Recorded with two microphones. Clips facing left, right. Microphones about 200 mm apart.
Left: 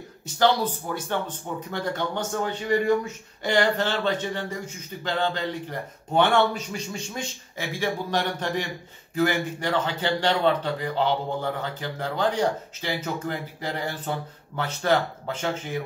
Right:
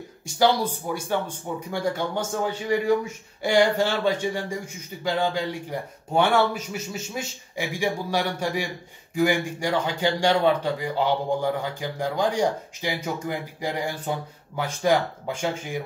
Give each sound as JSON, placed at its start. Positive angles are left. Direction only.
{"t": 0.4, "sound": "a man's voice", "side_deg": -10}